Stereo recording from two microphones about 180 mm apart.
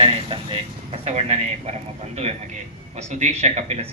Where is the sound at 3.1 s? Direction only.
40° right (ahead or behind).